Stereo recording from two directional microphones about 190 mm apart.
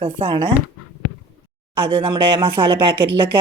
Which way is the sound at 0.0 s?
30° right (ahead or behind).